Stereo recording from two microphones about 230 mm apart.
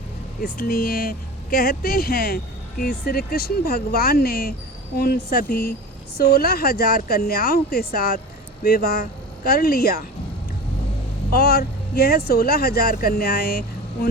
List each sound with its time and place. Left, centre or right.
0.4 s speech: left
11.3 s speech: left